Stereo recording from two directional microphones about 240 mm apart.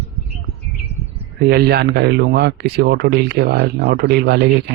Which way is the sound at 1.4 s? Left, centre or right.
Right.